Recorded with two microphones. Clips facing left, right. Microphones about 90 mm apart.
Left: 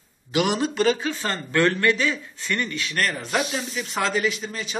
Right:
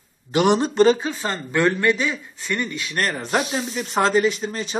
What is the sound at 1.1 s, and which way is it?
A man's voice, 15° right (ahead or behind).